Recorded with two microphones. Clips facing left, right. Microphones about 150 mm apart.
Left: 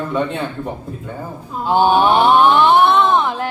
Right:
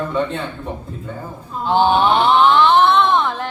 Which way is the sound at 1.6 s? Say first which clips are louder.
Left 1 dB; 10° left (ahead or behind).